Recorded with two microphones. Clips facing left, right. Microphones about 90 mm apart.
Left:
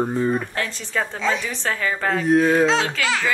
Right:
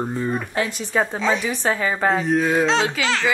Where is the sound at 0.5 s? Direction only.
20° right (ahead or behind).